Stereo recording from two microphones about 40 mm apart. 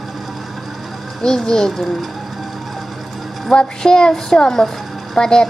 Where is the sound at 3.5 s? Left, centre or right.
Centre.